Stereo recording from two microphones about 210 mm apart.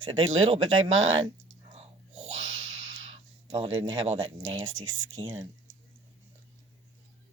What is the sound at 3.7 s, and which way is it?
Speech, 70° right (ahead or behind).